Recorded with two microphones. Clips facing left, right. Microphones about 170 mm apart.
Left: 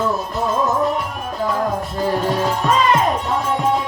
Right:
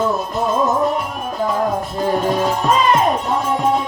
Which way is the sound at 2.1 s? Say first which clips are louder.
Right 2 dB; 15° right (ahead or behind).